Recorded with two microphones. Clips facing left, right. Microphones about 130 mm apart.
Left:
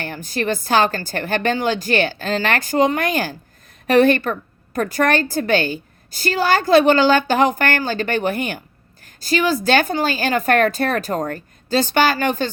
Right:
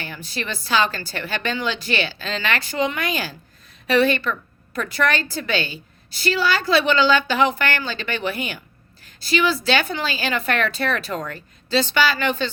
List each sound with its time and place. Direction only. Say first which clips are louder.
0.0 s a woman's voice: left 7 dB; 50° left (ahead or behind)